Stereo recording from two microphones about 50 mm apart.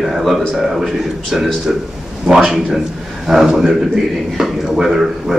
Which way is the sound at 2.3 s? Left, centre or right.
Centre.